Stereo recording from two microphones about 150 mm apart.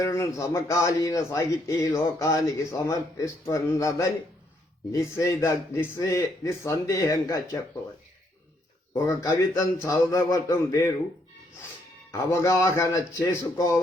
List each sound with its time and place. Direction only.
0.0 s speech: 20° left (ahead or behind)
8.9 s speech: 20° left (ahead or behind)
12.1 s speech: 20° left (ahead or behind)